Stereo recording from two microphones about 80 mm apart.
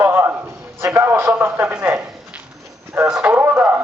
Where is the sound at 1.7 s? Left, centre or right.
Centre.